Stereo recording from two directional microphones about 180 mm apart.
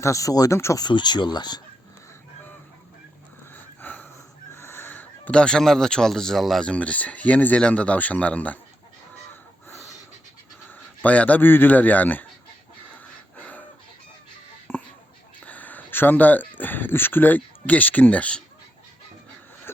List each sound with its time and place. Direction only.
0.0 s speech: 15° left (ahead or behind)
3.5 s wheeze: 10° left (ahead or behind)
4.5 s speech: 15° left (ahead or behind)
9.3 s crow: 10° left (ahead or behind)
10.7 s speech: 10° left (ahead or behind)
13.3 s a sound: 10° left (ahead or behind)
14.7 s a sound: 10° left (ahead or behind)
15.4 s speech: 10° left (ahead or behind)